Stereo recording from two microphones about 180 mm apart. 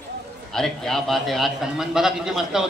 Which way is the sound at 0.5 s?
Centre (ahead or behind).